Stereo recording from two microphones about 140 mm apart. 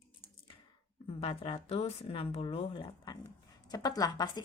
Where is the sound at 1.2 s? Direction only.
40° left (ahead or behind).